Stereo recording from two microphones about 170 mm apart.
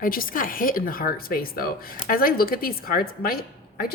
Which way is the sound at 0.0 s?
55° left (ahead or behind).